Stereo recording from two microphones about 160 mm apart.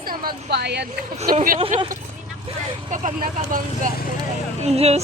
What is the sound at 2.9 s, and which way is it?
Speech, 50° right (ahead or behind).